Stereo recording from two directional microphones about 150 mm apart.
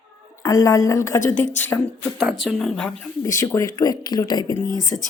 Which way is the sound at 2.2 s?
Centre (ahead or behind).